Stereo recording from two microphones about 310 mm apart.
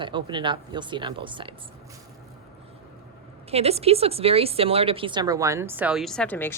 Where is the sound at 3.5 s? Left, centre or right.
Centre.